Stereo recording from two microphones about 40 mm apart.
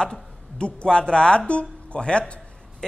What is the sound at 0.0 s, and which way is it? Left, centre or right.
A woman's voice, left.